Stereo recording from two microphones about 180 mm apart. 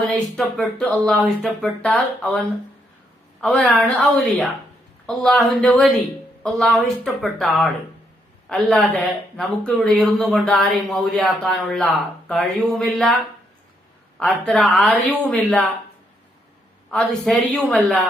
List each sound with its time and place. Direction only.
0.0 s speech: centre (ahead or behind)
3.4 s speech: 5° left (ahead or behind)
14.2 s speech: 5° left (ahead or behind)
16.9 s speech: 5° left (ahead or behind)